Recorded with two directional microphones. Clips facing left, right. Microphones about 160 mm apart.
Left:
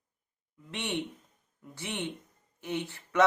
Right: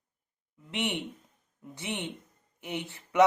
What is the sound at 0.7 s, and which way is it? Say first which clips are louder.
Speech: right 1 dB; 20° right (ahead or behind).